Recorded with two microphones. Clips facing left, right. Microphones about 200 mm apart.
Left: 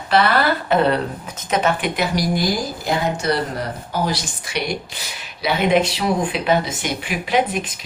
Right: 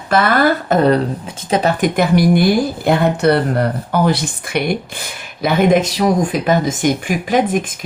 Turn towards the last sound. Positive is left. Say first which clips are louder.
# right 4 dB
turn(degrees=-50)  # may be behind; listen again after turning